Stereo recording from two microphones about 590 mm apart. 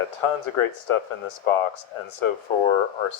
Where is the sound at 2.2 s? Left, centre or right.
Left.